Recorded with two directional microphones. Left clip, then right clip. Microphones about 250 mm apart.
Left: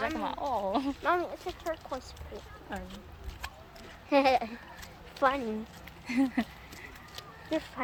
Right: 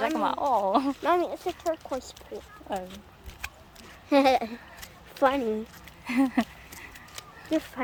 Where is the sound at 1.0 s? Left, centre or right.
Right.